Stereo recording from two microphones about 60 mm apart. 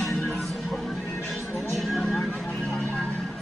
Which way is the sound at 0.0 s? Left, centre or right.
Centre.